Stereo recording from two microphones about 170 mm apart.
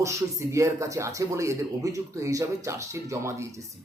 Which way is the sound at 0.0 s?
15° right (ahead or behind).